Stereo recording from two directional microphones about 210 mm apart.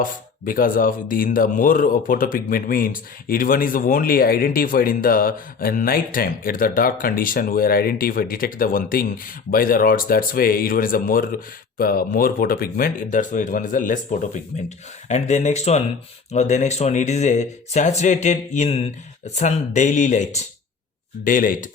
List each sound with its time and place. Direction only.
0.0 s speech: 40° left (ahead or behind)